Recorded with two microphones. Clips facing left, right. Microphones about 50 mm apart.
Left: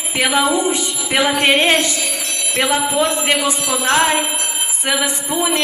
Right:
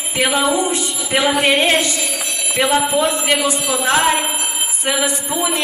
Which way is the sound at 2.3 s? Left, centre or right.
Centre.